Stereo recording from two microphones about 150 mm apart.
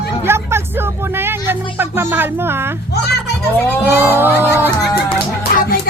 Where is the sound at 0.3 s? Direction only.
15° right (ahead or behind).